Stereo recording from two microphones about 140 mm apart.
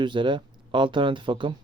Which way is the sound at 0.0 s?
35° right (ahead or behind).